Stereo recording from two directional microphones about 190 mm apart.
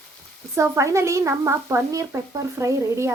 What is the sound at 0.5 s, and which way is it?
A woman's voice, 15° right (ahead or behind).